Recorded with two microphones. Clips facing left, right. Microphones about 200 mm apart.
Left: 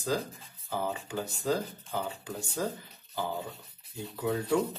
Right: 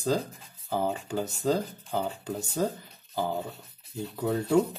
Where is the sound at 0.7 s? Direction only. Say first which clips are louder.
Right 4 dB; 30° right (ahead or behind).